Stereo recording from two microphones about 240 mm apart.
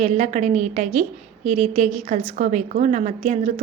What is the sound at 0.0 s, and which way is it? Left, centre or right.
A woman's voice, right.